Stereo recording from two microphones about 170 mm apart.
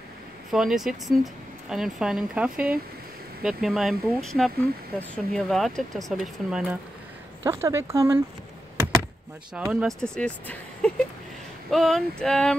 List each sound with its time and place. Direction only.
0.5 s speech: centre (ahead or behind)
7.4 s speech: 15° right (ahead or behind)
9.5 s speech: 5° right (ahead or behind)